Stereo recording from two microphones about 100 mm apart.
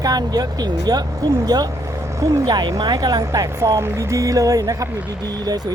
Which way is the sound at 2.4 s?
45° right (ahead or behind).